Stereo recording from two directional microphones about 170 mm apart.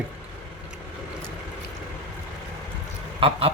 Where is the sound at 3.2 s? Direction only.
35° right (ahead or behind).